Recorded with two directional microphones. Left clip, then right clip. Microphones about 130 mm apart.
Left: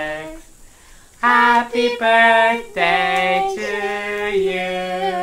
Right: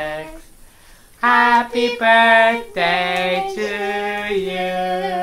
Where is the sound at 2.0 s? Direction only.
30° right (ahead or behind).